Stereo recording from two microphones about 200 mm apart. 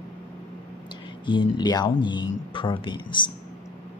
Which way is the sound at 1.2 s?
20° left (ahead or behind).